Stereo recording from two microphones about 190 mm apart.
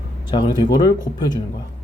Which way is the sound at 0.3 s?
20° left (ahead or behind).